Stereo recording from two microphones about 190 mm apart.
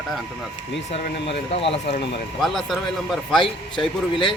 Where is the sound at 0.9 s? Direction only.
30° left (ahead or behind).